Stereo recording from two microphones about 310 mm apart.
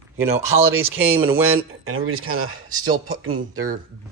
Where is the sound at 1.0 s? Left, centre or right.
Centre.